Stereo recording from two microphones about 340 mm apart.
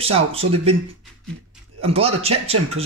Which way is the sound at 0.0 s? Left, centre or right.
Centre.